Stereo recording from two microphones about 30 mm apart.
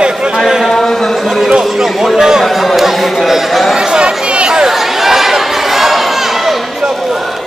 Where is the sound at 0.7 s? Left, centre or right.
Centre.